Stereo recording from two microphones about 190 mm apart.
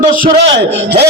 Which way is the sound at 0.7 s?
60° right (ahead or behind).